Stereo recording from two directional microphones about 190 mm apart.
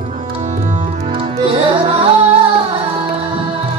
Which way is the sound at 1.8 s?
30° right (ahead or behind).